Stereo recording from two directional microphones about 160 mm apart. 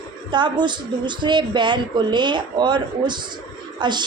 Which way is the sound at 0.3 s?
30° right (ahead or behind).